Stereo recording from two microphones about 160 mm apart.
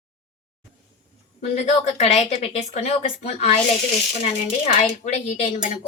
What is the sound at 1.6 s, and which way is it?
Speech, 45° left (ahead or behind).